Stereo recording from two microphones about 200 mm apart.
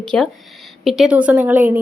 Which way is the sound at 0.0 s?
5° left (ahead or behind).